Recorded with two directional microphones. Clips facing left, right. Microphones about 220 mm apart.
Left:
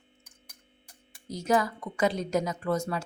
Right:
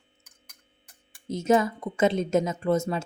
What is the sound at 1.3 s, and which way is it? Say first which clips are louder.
A woman's voice: right 4 dB; 25° right (ahead or behind).